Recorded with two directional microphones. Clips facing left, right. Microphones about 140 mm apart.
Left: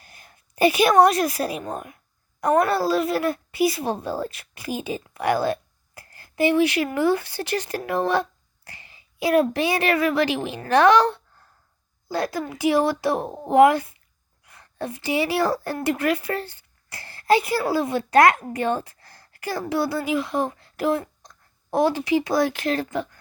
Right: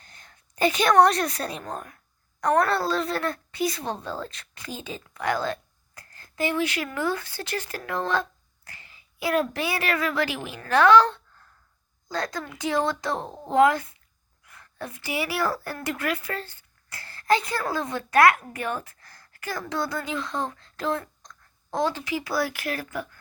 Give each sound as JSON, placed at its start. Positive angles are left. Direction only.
{"t": 0.0, "sound": "a woman's voice", "side_deg": 10}
{"t": 6.0, "sound": "a sound", "side_deg": 15}
{"t": 6.9, "sound": "a child's voice", "side_deg": 15}
{"t": 16.9, "sound": "a sound", "side_deg": 10}
{"t": 17.6, "sound": "a child's voice", "side_deg": 10}
{"t": 17.8, "sound": "a child's voice", "side_deg": 20}